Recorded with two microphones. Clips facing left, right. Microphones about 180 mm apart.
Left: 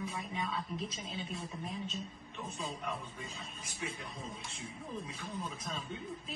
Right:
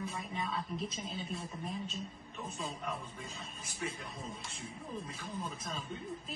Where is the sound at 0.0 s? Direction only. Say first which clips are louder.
Even; centre (ahead or behind).